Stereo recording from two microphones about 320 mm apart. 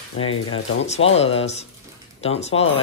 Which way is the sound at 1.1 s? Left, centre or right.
Centre.